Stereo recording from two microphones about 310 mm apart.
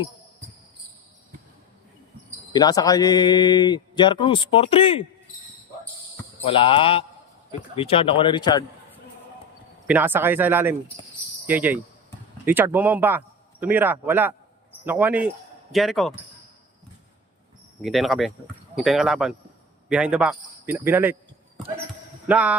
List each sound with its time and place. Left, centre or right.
2.5 s speech: centre
6.4 s speech: centre
9.8 s speech: centre
17.8 s speech: centre
22.3 s speech: centre